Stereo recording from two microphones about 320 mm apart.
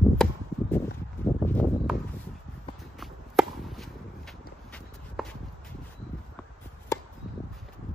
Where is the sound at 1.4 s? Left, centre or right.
Centre.